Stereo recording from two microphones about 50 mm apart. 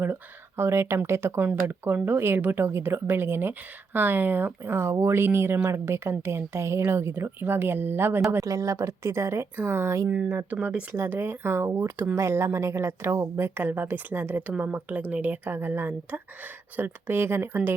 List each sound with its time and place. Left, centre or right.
0.5 s speech: right
1.6 s speech: right
7.3 s speech: right
8.3 s a woman's voice: right
9.6 s speech: right
10.2 s speech: right
10.9 s speech: right
15.4 s speech: right
17.1 s speech: right